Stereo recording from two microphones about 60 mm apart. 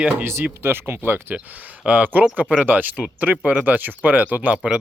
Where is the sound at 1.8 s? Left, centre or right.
Right.